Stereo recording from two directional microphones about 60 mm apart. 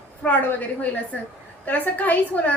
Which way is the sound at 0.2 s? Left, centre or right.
Left.